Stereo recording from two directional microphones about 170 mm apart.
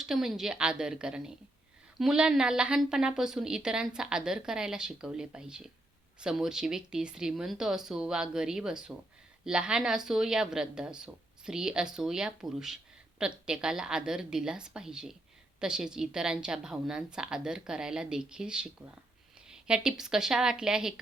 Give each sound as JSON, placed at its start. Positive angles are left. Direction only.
{"t": 0.0, "sound": "a woman's voice", "side_deg": 0}